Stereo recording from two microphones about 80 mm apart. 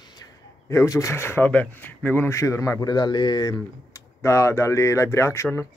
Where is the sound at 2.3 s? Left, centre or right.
Left.